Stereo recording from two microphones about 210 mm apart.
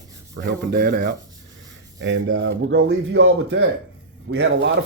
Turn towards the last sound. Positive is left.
turn(degrees=-60)  # may be behind; listen again after turning